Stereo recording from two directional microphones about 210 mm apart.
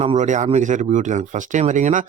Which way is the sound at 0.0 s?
30° right (ahead or behind).